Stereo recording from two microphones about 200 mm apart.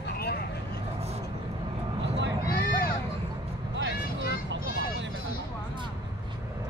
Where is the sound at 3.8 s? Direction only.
65° right (ahead or behind).